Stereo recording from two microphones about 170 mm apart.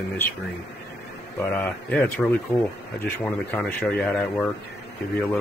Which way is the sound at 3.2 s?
10° left (ahead or behind).